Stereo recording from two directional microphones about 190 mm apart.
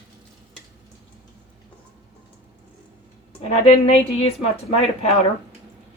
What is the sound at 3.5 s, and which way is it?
A woman's voice, 35° left (ahead or behind).